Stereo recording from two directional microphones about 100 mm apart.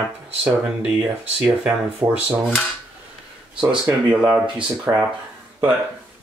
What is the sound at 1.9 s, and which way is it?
Speech, 10° right (ahead or behind).